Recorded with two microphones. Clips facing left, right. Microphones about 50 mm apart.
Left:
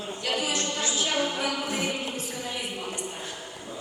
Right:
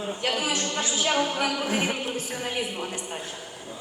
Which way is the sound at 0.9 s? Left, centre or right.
Right.